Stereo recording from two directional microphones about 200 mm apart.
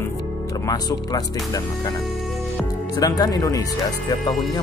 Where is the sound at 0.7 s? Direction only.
20° left (ahead or behind).